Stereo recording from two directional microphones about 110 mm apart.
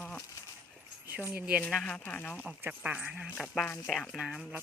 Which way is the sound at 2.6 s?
15° right (ahead or behind).